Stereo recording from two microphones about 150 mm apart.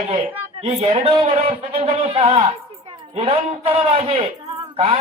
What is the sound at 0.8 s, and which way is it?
A woman's voice, 45° right (ahead or behind).